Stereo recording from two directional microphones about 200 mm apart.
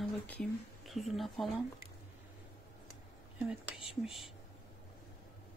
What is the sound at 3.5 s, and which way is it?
Speech, 5° right (ahead or behind).